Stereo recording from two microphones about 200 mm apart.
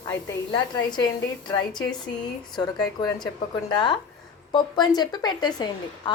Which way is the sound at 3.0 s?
20° left (ahead or behind).